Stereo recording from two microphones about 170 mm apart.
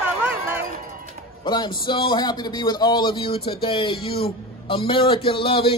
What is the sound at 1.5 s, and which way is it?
Speech, 25° left (ahead or behind).